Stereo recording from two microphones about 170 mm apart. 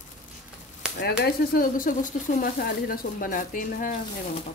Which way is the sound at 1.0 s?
65° left (ahead or behind).